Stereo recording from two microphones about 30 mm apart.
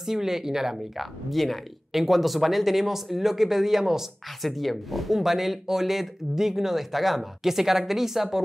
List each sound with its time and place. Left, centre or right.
0.0 s speech: centre
0.9 s speech: centre
4.4 s speech: centre